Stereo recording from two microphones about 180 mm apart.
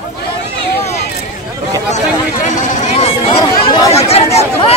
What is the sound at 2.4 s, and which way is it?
Chatter, 40° left (ahead or behind).